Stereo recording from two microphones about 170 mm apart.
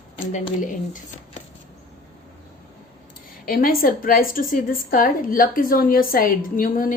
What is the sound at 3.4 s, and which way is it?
A woman's voice, 55° left (ahead or behind).